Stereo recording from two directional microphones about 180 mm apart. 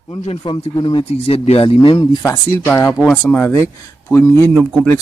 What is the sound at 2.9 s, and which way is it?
Speech, 5° right (ahead or behind).